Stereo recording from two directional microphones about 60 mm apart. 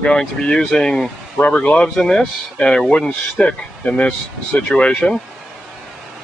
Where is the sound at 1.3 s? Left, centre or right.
Left.